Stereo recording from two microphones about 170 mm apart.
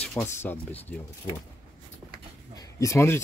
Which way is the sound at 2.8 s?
15° left (ahead or behind).